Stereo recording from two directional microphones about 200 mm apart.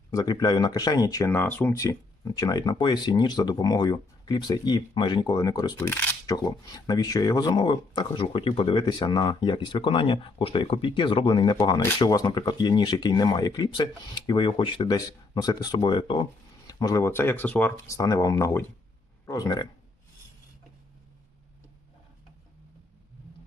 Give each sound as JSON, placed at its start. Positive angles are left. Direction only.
{"t": 0.1, "sound": "speech", "side_deg": 20}